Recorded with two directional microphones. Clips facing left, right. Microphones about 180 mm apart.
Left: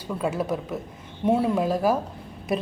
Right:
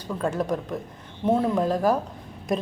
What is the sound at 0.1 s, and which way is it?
A woman's voice, 5° left (ahead or behind).